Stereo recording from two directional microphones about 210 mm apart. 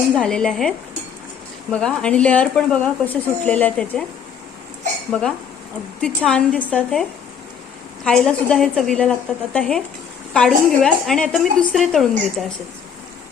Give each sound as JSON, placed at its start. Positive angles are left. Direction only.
{"t": 0.1, "sound": "speech", "side_deg": 5}
{"t": 1.7, "sound": "speech", "side_deg": 5}
{"t": 6.0, "sound": "speech", "side_deg": 5}
{"t": 8.0, "sound": "speech", "side_deg": 5}